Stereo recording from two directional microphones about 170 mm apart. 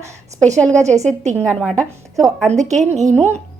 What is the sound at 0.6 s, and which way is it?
Speech, 5° left (ahead or behind).